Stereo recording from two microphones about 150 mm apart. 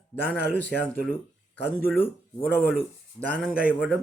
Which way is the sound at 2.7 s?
10° left (ahead or behind).